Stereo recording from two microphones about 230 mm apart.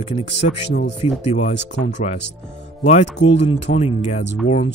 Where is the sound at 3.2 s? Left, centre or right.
Left.